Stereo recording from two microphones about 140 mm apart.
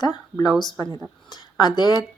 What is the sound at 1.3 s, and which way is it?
Speech, 30° left (ahead or behind).